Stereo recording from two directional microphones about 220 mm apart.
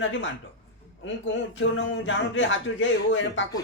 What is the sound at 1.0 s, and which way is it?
Speech, 60° left (ahead or behind).